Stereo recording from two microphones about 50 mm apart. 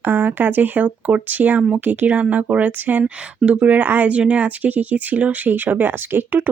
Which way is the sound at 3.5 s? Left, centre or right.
Right.